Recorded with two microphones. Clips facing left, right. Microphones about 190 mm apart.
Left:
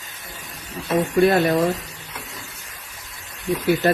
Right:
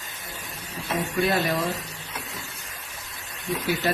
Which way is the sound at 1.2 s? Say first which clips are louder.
Left 7 dB; 50° left (ahead or behind).